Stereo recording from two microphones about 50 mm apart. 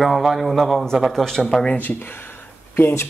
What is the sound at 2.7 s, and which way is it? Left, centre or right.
Speech, left.